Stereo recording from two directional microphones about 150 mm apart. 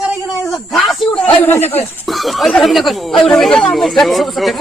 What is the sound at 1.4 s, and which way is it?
Speech, 15° left (ahead or behind).